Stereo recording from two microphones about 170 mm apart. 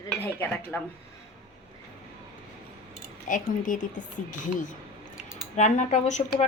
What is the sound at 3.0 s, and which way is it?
Speech, 50° left (ahead or behind).